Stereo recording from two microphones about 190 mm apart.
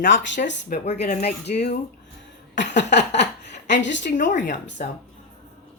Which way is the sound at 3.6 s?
70° left (ahead or behind).